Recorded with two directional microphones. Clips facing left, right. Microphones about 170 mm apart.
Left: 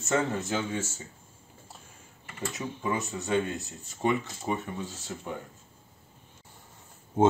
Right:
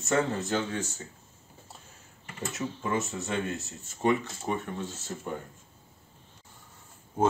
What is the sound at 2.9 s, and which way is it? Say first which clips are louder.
Speech: left 3 dB; centre (ahead or behind).